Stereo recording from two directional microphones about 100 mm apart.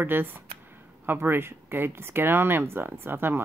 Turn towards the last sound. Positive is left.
turn(degrees=-25)  # may be behind; listen again after turning